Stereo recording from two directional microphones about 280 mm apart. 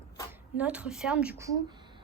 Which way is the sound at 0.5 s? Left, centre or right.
Centre.